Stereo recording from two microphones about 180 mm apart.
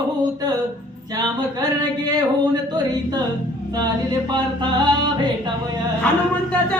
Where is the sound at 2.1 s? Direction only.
20° right (ahead or behind).